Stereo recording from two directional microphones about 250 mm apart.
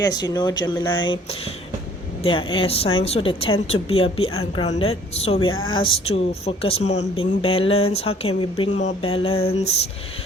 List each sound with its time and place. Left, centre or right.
0.0 s a woman's voice: centre